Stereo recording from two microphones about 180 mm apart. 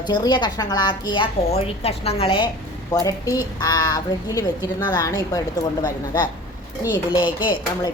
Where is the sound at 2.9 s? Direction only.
20° left (ahead or behind).